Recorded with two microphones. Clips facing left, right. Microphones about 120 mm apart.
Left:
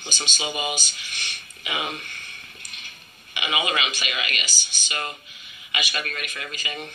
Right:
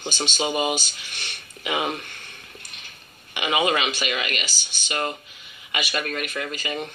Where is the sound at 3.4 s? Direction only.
40° right (ahead or behind).